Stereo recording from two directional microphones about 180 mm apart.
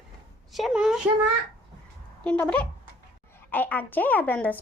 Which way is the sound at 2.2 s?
10° left (ahead or behind).